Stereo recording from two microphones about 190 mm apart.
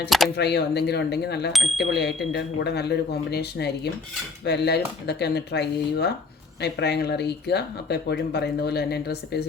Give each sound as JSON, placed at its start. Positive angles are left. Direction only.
{"t": 0.3, "sound": "speech", "side_deg": 60}
{"t": 1.5, "sound": "speech", "side_deg": 0}
{"t": 1.9, "sound": "speech", "side_deg": 65}